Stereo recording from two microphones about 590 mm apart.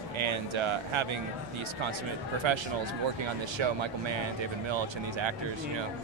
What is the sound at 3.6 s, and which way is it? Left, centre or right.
Speech, right.